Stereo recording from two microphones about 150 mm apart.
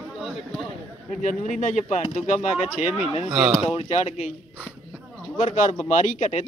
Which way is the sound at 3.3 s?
5° right (ahead or behind).